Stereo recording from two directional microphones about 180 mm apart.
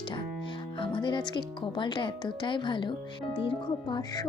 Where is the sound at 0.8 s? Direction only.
25° left (ahead or behind).